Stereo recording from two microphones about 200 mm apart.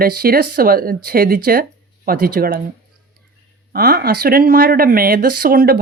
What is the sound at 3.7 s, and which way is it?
Speech, 50° right (ahead or behind).